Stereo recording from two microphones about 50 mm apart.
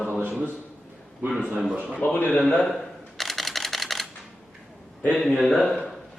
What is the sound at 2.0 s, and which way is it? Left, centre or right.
Speech, left.